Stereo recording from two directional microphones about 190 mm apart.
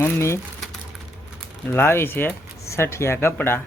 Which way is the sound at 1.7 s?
10° left (ahead or behind).